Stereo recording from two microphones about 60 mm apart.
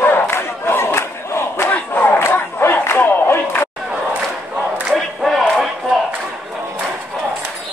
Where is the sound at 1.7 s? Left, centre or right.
Left.